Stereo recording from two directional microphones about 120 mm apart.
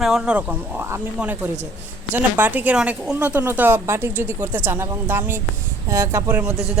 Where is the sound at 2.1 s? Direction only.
15° right (ahead or behind).